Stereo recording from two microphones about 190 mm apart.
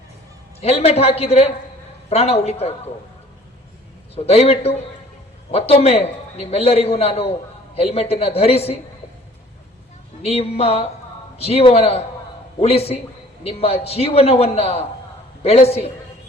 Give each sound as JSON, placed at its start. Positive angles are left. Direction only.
{"t": 0.6, "sound": "a man's voice", "side_deg": 35}
{"t": 4.1, "sound": "a man's voice", "side_deg": 30}
{"t": 10.2, "sound": "a man's voice", "side_deg": 30}